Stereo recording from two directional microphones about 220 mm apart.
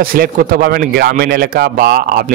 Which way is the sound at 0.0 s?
40° right (ahead or behind).